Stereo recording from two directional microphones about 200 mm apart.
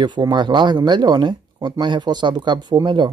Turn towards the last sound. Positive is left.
turn(degrees=-25)  # may be behind; listen again after turning